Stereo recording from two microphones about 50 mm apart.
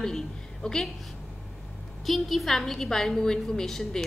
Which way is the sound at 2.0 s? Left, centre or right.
Centre.